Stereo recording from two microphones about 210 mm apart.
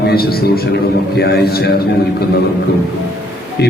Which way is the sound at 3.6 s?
50° left (ahead or behind).